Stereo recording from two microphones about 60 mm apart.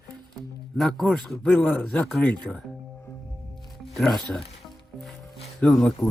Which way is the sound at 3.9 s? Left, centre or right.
Centre.